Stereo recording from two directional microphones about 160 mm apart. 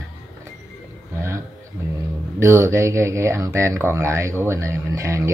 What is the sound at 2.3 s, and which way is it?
Speech, 15° right (ahead or behind).